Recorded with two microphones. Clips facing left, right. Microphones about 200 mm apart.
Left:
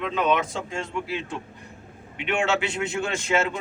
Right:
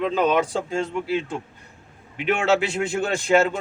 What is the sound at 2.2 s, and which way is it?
A man's voice, 40° right (ahead or behind).